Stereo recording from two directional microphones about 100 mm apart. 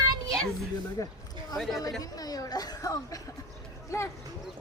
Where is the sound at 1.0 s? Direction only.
35° left (ahead or behind).